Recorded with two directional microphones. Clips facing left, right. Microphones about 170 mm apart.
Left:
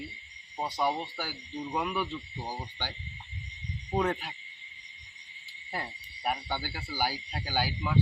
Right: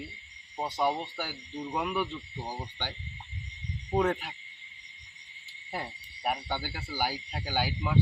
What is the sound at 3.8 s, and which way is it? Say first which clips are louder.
Speech: right 2 dB; 5° right (ahead or behind).